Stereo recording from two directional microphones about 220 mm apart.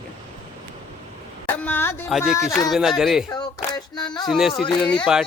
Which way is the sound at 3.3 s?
20° left (ahead or behind).